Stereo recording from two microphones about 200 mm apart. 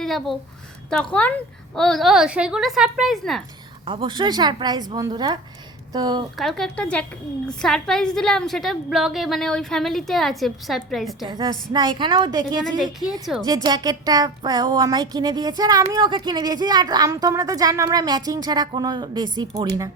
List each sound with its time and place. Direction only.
0.0 s a sound: centre (ahead or behind)
0.9 s a woman's voice: 5° left (ahead or behind)
3.8 s speech: 25° right (ahead or behind)
6.3 s a woman's voice: centre (ahead or behind)
11.3 s speech: 20° right (ahead or behind)